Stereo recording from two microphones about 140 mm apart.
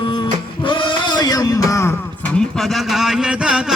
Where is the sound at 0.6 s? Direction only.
35° left (ahead or behind).